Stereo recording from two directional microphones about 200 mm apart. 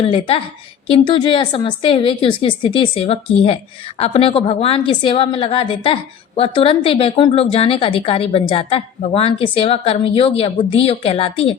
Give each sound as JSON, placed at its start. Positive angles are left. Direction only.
{"t": 0.0, "sound": "a woman's voice", "side_deg": 25}